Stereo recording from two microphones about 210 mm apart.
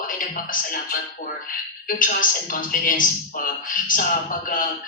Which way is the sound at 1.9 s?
40° left (ahead or behind).